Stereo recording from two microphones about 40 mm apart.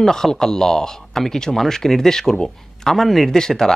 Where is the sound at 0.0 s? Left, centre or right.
Centre.